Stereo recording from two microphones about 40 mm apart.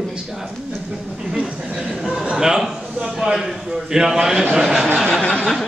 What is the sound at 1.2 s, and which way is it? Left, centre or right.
Speech, right.